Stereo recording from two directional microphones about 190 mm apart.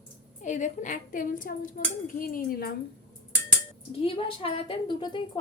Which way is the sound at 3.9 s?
30° left (ahead or behind).